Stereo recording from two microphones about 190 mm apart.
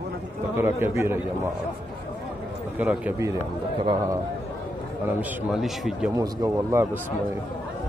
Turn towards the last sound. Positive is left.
turn(degrees=-15)  # may be behind; listen again after turning